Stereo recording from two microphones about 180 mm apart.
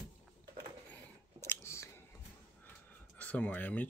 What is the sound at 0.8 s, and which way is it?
Chewing, 10° left (ahead or behind).